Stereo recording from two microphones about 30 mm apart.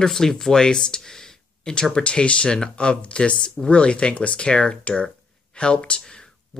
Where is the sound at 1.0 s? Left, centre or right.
Centre.